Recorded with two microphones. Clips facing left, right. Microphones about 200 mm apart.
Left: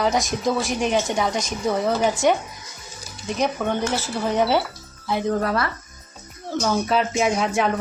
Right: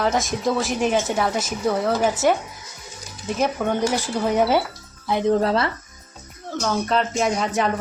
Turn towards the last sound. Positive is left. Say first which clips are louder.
# left 1 dB
turn(degrees=0)  # may be behind; listen again after turning